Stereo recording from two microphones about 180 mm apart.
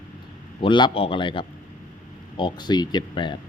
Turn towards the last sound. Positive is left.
turn(degrees=25)  # may be behind; listen again after turning